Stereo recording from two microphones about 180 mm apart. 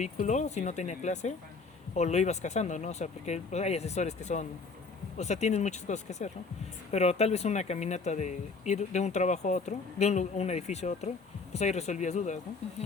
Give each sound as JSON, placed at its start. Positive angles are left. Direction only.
{"t": 0.0, "sound": "speech", "side_deg": 40}